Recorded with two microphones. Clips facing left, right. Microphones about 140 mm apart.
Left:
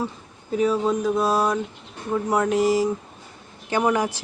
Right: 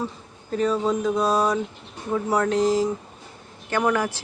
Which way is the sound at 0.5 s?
5° left (ahead or behind).